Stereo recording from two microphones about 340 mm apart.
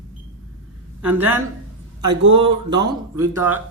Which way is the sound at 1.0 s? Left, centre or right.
Centre.